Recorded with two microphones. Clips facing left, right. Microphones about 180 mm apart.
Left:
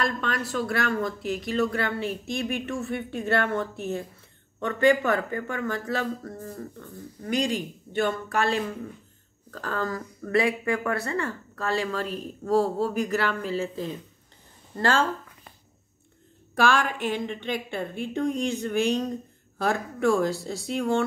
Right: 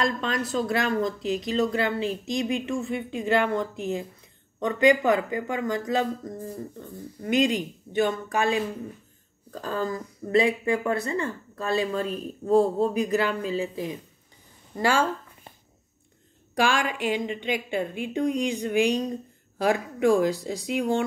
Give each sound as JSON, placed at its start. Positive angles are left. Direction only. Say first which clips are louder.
{"t": 0.0, "sound": "speech", "louder": "right 2 dB", "side_deg": -20}
{"t": 16.5, "sound": "speech", "louder": "left 1 dB", "side_deg": -15}